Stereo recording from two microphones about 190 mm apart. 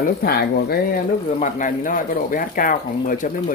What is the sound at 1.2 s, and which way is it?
Speech, 40° left (ahead or behind).